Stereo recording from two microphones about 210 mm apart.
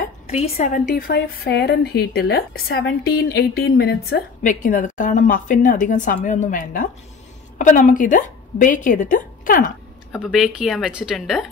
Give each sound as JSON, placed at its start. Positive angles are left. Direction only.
{"t": 0.3, "sound": "a woman's voice", "side_deg": 30}
{"t": 10.1, "sound": "a woman's voice", "side_deg": 0}